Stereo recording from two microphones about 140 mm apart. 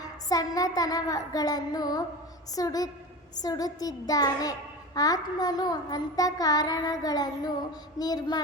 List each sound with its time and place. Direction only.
0.0 s child singing: 25° left (ahead or behind)